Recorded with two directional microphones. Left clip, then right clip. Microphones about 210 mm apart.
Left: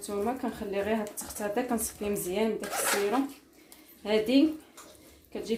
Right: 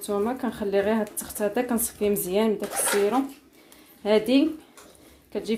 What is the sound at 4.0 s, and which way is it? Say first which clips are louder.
Speech: right 4 dB; 40° right (ahead or behind).